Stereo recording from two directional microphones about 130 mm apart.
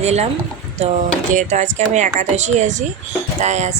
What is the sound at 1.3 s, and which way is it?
Speech, 70° right (ahead or behind).